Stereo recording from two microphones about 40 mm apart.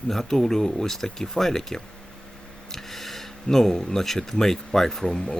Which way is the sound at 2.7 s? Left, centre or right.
Centre.